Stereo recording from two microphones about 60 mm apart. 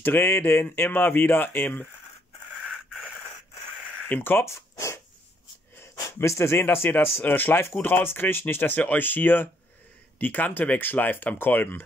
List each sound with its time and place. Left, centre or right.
0.0 s speech: left
4.1 s speech: left
4.5 s zipper: left
6.1 s speech: left
6.6 s speech: left